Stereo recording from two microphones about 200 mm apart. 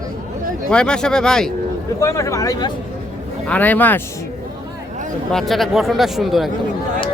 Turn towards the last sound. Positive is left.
turn(degrees=0)  # may be behind; listen again after turning